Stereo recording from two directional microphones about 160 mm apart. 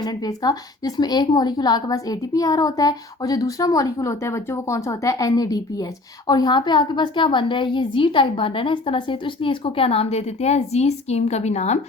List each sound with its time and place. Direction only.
0.0 s a woman's voice: 25° left (ahead or behind); by 11.8 s 45° left (ahead or behind)